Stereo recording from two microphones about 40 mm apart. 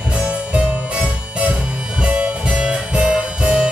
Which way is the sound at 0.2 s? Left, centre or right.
Right.